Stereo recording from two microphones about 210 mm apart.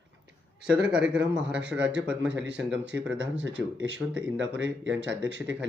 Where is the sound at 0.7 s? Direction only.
5° right (ahead or behind).